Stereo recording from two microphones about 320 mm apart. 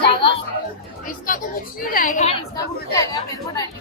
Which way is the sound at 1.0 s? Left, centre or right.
Left.